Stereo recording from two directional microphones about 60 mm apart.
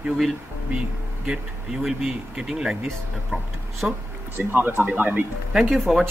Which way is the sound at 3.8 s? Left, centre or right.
Centre.